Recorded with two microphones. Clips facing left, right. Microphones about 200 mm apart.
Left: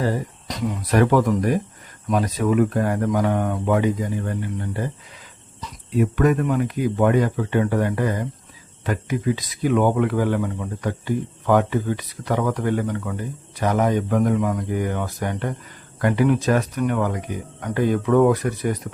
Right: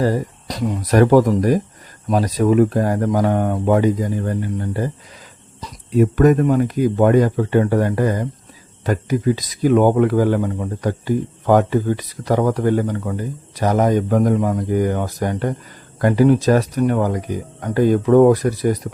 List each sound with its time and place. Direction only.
0.0 s speech: 35° right (ahead or behind)